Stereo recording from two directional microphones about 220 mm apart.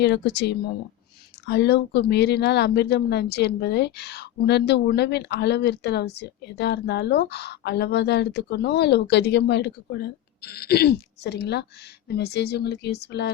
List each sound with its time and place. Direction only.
0.0 s speech: 50° left (ahead or behind)